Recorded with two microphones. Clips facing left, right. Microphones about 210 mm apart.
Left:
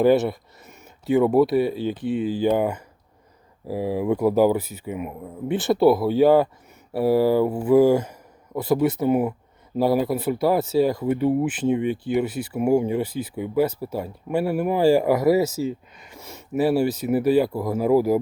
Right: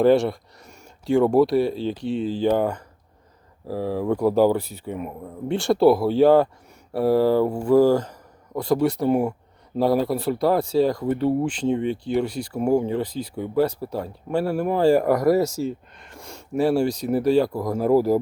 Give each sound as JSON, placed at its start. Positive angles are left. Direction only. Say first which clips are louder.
{"t": 0.0, "sound": "speech", "louder": "right 1 dB", "side_deg": 5}
{"t": 2.0, "sound": "speech", "louder": "left 1 dB", "side_deg": 55}
{"t": 2.2, "sound": "speech", "louder": "even", "side_deg": 5}